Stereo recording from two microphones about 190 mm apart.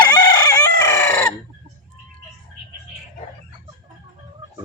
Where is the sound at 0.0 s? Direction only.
20° left (ahead or behind).